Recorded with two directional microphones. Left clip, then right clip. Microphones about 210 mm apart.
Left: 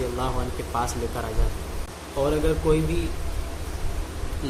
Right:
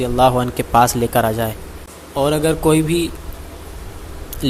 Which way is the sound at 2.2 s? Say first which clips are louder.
Right 7 dB; 45° right (ahead or behind).